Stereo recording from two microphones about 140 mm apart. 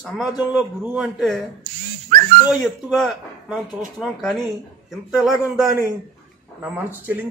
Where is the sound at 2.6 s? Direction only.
Centre (ahead or behind).